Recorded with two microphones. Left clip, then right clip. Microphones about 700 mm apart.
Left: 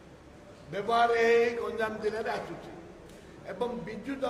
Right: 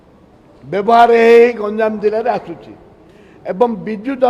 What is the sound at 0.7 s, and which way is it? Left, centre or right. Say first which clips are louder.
A man's voice: right 17 dB; right.